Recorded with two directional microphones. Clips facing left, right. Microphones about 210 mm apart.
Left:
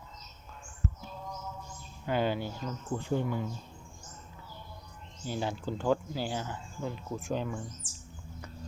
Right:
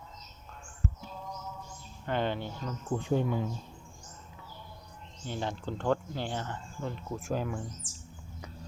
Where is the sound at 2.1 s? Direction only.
5° left (ahead or behind).